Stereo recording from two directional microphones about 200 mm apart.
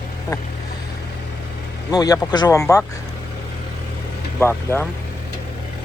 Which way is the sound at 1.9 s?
20° left (ahead or behind).